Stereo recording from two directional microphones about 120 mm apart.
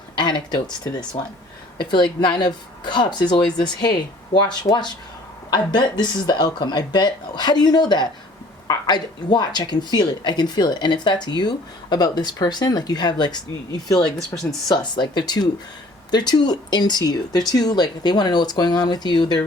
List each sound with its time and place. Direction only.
0.2 s a woman's voice: 40° left (ahead or behind)
2.2 s a woman's voice: 40° left (ahead or behind)
14.7 s a woman's voice: 40° left (ahead or behind)